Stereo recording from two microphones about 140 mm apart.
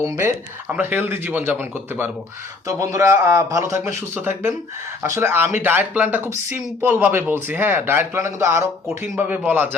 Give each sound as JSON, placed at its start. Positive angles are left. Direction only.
{"t": 0.0, "sound": "a man's voice", "side_deg": -20}